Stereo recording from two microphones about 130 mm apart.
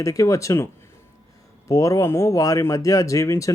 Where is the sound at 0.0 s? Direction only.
25° left (ahead or behind).